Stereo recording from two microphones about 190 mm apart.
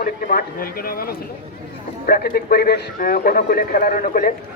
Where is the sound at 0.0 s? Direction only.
50° left (ahead or behind).